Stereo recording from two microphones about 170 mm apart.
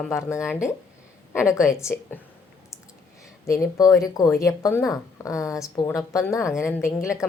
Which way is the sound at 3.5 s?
20° left (ahead or behind).